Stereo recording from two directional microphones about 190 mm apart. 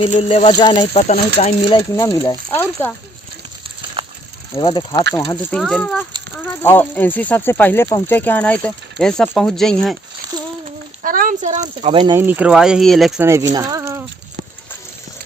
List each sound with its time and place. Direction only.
0.0 s speech: 30° left (ahead or behind); by 2.9 s 10° left (ahead or behind)
4.0 s pulleys: 30° right (ahead or behind)
4.5 s speech: 25° left (ahead or behind)
5.5 s speech: 5° left (ahead or behind)
11.0 s speech: 45° right (ahead or behind); by 12.1 s 30° right (ahead or behind)
12.1 s speech: 10° right (ahead or behind)
13.2 s speech: 15° right (ahead or behind)